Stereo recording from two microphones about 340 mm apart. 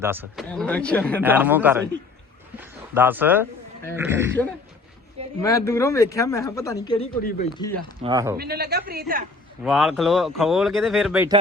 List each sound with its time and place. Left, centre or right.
0.0 s speech: centre
5.4 s speech: centre
8.0 s speech: centre
8.4 s a man's voice: right
9.6 s speech: centre